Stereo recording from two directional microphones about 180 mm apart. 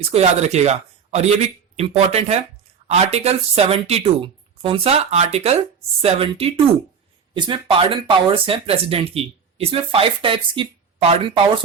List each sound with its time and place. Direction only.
0.1 s speech: 35° right (ahead or behind)